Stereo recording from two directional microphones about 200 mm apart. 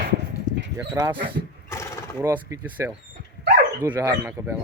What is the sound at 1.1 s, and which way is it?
Speech, 25° right (ahead or behind).